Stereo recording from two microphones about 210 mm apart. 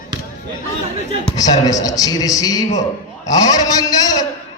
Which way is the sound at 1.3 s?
15° left (ahead or behind).